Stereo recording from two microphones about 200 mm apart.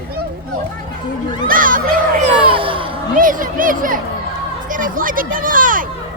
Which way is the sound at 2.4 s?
25° right (ahead or behind).